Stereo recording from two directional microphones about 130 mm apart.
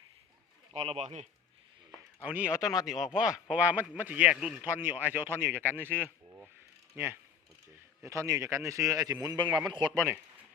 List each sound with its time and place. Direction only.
0.7 s speech: 45° right (ahead or behind)
2.2 s a man's voice: 10° right (ahead or behind); by 10.0 s 35° right (ahead or behind)